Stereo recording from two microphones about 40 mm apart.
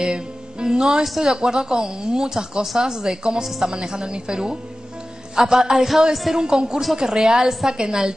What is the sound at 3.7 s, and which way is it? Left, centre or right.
A woman's voice, centre.